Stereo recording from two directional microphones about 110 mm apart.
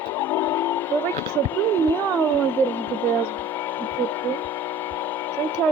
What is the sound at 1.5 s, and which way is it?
Speech, 20° left (ahead or behind).